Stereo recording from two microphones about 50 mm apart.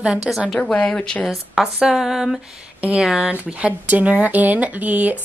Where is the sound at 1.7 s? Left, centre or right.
Centre.